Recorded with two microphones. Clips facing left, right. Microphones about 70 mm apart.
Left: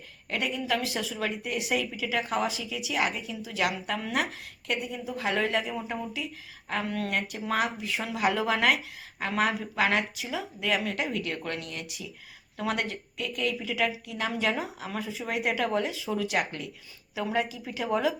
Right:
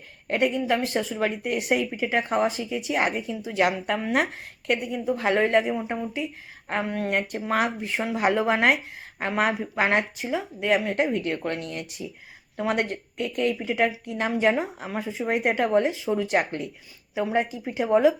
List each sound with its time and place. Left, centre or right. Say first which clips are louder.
0.3 s a woman's voice: right 7 dB; right
7.1 s speech: right 4 dB; right
15.6 s speech: right 6 dB; right